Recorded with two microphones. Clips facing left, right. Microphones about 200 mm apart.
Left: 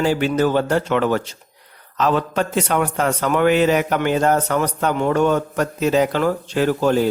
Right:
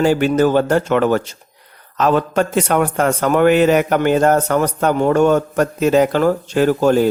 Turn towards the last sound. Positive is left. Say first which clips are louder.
# right 4 dB
turn(degrees=-45)  # may be behind; listen again after turning